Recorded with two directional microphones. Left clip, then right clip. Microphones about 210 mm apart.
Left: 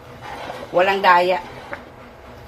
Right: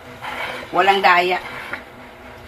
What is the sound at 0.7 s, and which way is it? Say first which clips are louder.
Speech: even; 15° left (ahead or behind).